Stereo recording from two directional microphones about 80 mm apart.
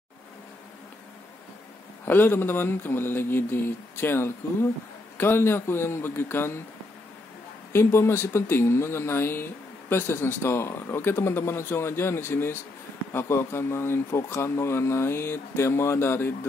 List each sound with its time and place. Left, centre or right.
2.0 s speech: left
7.7 s speech: left